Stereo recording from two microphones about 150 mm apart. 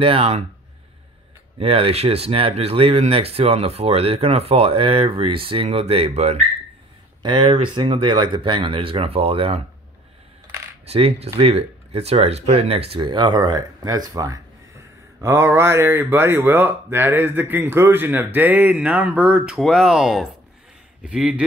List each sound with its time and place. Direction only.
0.0 s speech: 40° right (ahead or behind)
1.6 s speech: 40° right (ahead or behind)
7.2 s speech: 35° right (ahead or behind)
10.9 s speech: 40° right (ahead or behind); by 21.5 s 5° right (ahead or behind)